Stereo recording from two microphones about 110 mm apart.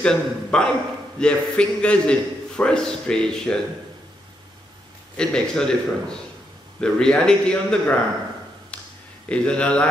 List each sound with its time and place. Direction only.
0.0 s a man's voice: 5° left (ahead or behind)
5.1 s a man's voice: 5° left (ahead or behind)
8.7 s a sound: 10° left (ahead or behind)
9.3 s a man's voice: 10° left (ahead or behind)